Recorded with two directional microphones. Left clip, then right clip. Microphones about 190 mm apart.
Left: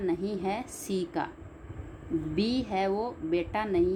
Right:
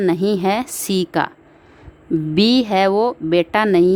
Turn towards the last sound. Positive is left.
turn(degrees=-55)  # may be behind; listen again after turning